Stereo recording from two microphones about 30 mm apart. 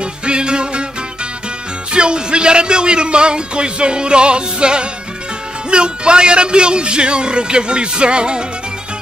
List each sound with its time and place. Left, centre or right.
0.0 s music: right
1.9 s a man's voice: right